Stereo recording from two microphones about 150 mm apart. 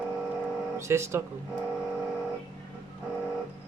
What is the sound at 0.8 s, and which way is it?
Speech, 20° right (ahead or behind).